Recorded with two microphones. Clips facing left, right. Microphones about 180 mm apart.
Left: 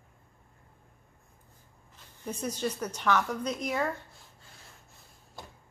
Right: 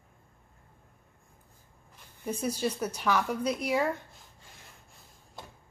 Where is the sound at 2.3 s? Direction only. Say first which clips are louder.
Right 2 dB; 10° right (ahead or behind).